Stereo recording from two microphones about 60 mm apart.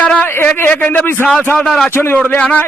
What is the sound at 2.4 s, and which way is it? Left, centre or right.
Speech, left.